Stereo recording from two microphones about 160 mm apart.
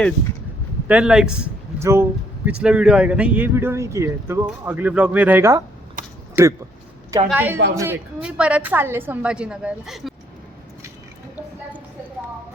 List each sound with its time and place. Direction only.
0.9 s a man's voice: 5° right (ahead or behind)
1.8 s a woman's voice: 15° right (ahead or behind)
2.5 s a woman's voice: 5° right (ahead or behind)